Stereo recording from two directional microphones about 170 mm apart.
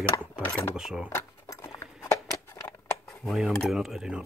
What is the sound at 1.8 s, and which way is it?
Scissors, 15° left (ahead or behind).